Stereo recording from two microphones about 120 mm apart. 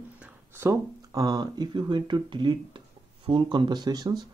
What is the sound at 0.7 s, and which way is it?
Speech, 30° right (ahead or behind).